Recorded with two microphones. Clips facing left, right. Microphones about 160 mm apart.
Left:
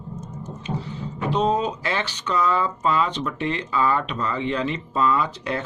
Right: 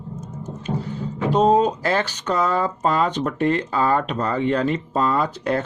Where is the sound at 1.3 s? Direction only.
45° right (ahead or behind).